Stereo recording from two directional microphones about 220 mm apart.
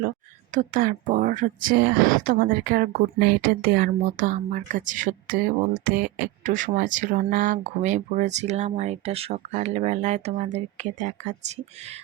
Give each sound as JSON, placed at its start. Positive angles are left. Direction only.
{"t": 0.5, "sound": "speech", "side_deg": -35}